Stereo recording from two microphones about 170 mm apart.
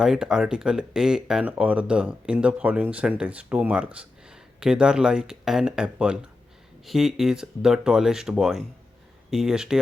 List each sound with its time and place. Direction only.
0.0 s speech: 5° right (ahead or behind)